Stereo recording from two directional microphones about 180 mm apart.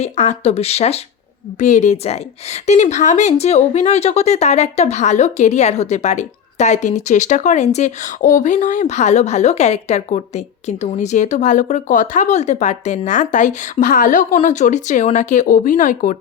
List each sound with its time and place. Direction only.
0.0 s a woman's voice: 40° left (ahead or behind)